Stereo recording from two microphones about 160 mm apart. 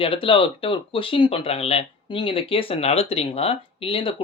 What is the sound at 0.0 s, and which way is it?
Speech, 35° left (ahead or behind).